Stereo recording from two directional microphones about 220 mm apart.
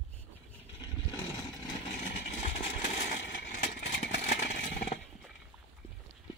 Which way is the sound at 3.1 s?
50° left (ahead or behind).